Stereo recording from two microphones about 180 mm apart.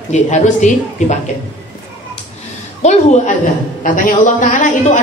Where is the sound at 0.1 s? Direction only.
40° left (ahead or behind).